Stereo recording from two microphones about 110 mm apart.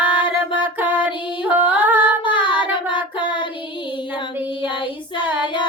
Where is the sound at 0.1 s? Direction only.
45° left (ahead or behind).